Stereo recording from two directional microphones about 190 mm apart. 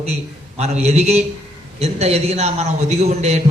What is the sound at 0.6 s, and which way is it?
A man's voice, 35° right (ahead or behind).